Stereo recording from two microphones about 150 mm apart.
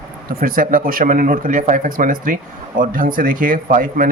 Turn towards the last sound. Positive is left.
turn(degrees=-65)  # may be behind; listen again after turning